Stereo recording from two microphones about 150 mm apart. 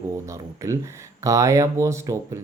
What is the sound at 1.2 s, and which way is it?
Speech, 20° right (ahead or behind).